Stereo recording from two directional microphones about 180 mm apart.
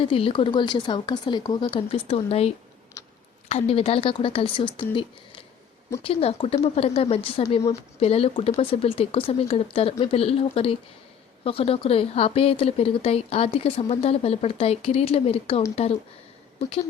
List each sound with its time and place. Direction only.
0.0 s speech: 30° left (ahead or behind)
3.0 s clicking: 15° left (ahead or behind)
3.5 s a woman's voice: 35° left (ahead or behind)